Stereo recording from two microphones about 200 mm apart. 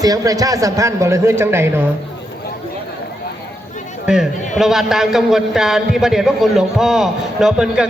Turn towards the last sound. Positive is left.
turn(degrees=-5)  # may be behind; listen again after turning